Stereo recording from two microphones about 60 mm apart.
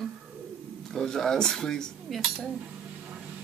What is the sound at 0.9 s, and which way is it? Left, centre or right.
Speech, centre.